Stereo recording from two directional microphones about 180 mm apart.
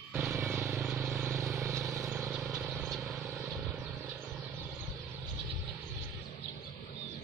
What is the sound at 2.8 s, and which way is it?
Vehicle, centre (ahead or behind).